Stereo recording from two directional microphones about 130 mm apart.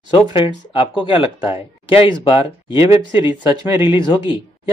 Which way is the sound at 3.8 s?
40° left (ahead or behind).